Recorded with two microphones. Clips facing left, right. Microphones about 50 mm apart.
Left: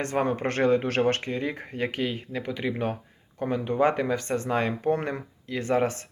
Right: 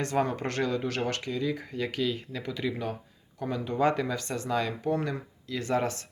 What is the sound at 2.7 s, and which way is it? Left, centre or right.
Speech, left.